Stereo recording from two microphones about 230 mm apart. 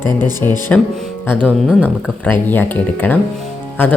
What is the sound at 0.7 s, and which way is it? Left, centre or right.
Speech, centre.